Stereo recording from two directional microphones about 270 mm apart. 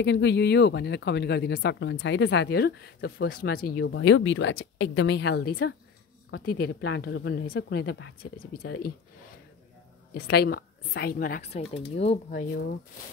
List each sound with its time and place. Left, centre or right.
0.0 s speech: left
10.1 s speech: left